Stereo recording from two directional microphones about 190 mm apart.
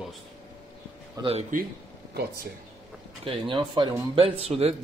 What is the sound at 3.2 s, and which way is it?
Speech, 25° right (ahead or behind).